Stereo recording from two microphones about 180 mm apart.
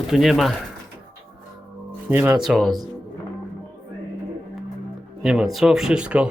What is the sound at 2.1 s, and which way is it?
Speech, 10° right (ahead or behind).